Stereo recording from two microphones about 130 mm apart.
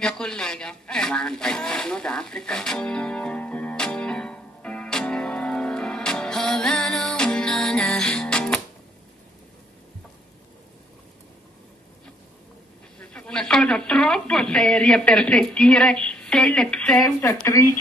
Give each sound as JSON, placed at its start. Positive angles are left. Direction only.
{"t": 0.0, "sound": "a sound", "side_deg": 5}
{"t": 13.0, "sound": "speech", "side_deg": 10}
{"t": 17.2, "sound": "speech", "side_deg": 25}